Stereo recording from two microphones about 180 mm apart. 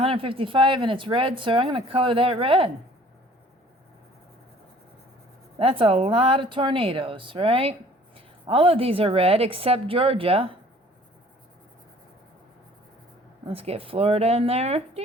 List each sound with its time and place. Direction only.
0.0 s speech: 30° right (ahead or behind)
5.5 s a woman's voice: 30° right (ahead or behind)
13.5 s a woman's voice: 30° right (ahead or behind)